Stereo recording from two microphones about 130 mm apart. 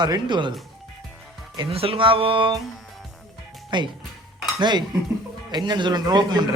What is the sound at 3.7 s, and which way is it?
Speech, 35° right (ahead or behind).